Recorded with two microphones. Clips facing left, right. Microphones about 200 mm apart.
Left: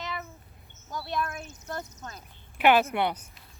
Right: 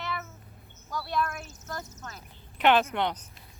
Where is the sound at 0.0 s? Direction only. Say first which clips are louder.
Right 1 dB; 20° left (ahead or behind).